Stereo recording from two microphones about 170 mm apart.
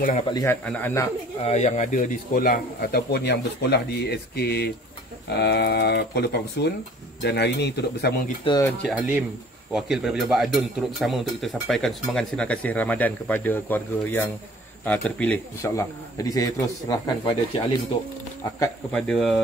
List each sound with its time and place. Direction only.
0.3 s a man's voice: 20° left (ahead or behind)
1.4 s speech: 40° left (ahead or behind); by 8.3 s 75° left (ahead or behind)
8.8 s a man's voice: 10° right (ahead or behind); by 17.7 s 25° left (ahead or behind)
18.9 s speech: 5° left (ahead or behind)